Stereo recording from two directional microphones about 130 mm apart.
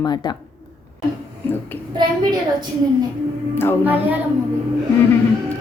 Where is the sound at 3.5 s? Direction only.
15° left (ahead or behind).